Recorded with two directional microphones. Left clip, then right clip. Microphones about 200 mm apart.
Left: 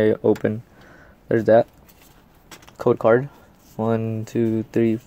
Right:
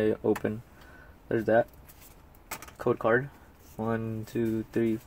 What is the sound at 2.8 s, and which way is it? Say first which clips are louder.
Speech: left 9 dB; 30° left (ahead or behind).